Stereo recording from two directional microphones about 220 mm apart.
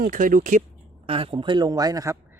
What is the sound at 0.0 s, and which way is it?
Speech, 35° right (ahead or behind).